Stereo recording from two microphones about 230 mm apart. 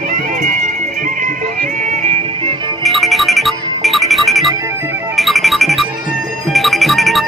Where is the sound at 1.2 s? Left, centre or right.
Right.